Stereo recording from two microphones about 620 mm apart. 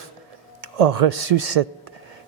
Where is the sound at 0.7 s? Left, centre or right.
Right.